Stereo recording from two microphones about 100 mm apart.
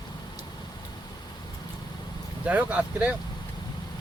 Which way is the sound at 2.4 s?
15° right (ahead or behind).